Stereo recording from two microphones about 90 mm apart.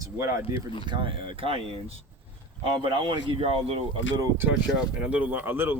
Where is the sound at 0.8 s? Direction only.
60° right (ahead or behind); by 2.0 s 90° right.